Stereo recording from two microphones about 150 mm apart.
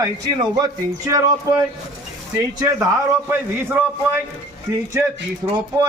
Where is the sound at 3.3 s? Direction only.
15° right (ahead or behind).